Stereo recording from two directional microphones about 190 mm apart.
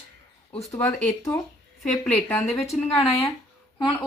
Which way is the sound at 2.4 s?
35° left (ahead or behind).